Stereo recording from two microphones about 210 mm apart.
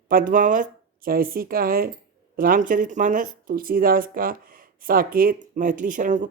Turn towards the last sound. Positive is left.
turn(degrees=-35)  # may be behind; listen again after turning